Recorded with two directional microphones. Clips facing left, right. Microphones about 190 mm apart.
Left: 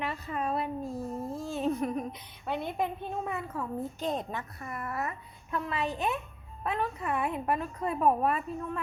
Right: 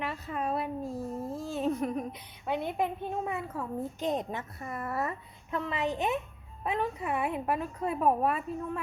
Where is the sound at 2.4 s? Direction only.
15° right (ahead or behind).